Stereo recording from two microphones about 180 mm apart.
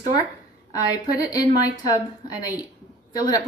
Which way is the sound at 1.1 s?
20° left (ahead or behind).